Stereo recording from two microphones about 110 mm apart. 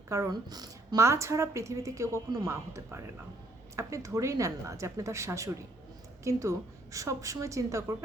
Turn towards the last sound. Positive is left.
turn(degrees=-30)  # may be behind; listen again after turning